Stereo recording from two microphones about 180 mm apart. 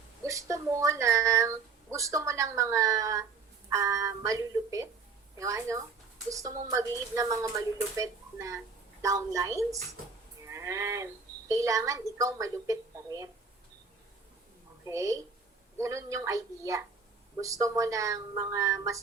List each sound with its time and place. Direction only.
0.3 s speech: 15° right (ahead or behind)
14.8 s speech: 15° right (ahead or behind)